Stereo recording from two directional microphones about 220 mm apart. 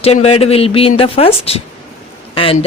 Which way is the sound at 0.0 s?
30° left (ahead or behind).